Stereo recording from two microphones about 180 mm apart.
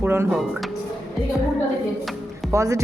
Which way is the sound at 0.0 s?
10° right (ahead or behind).